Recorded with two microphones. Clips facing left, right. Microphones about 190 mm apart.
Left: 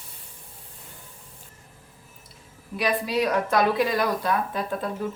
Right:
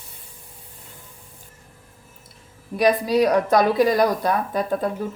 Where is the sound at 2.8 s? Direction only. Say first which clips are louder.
Right 7 dB; 40° right (ahead or behind).